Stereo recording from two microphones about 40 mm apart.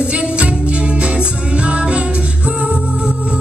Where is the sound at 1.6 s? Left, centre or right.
Right.